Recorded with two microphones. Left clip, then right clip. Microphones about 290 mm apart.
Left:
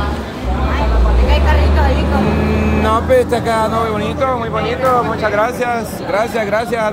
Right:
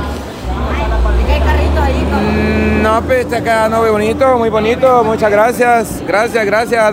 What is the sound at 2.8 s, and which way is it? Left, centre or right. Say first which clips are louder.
Speech: left 2 dB; centre.